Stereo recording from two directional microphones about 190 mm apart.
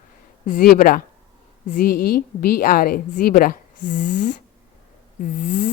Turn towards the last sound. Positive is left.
turn(degrees=40)  # may be behind; listen again after turning